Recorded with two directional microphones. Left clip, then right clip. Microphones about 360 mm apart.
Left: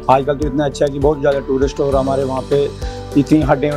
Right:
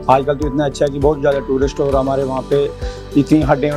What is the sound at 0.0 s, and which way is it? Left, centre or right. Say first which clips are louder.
Speech: even; centre.